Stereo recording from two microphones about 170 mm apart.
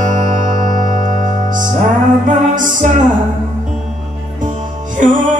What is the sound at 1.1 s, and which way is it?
Music, 50° right (ahead or behind).